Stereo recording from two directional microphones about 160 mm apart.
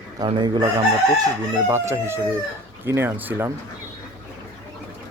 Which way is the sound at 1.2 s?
20° right (ahead or behind).